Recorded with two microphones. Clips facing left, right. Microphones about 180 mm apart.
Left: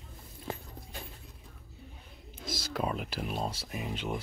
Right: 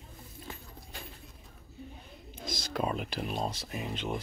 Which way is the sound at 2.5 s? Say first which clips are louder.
Right 1 dB; 5° left (ahead or behind).